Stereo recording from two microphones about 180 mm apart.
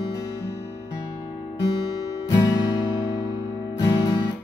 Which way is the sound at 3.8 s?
20° left (ahead or behind).